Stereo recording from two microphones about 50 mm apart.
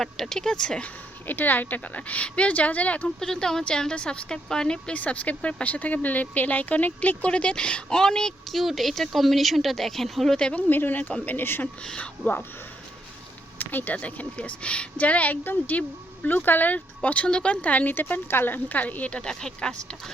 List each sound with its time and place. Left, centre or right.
0.0 s a woman's voice: centre
1.3 s speech: left
3.2 s a woman's voice: centre
4.9 s speech: left; by 8.3 s centre
8.5 s speech: centre
10.5 s a woman's voice: left
11.9 s speech: left
13.6 s a woman's voice: left
17.9 s a woman's voice: left; by 20.0 s centre